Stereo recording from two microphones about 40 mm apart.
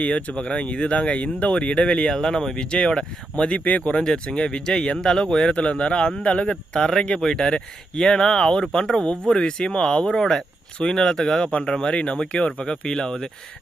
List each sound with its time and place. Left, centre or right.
0.0 s speech: left
2.0 s speech: centre
3.6 s speech: left
3.9 s speech: left